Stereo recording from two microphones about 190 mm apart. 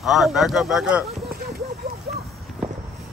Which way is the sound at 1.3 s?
55° right (ahead or behind).